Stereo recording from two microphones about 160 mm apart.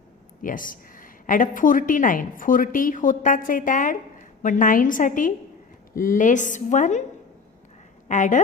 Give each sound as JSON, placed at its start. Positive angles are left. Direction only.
{"t": 0.4, "sound": "a woman's voice", "side_deg": 60}
{"t": 8.0, "sound": "speech", "side_deg": 50}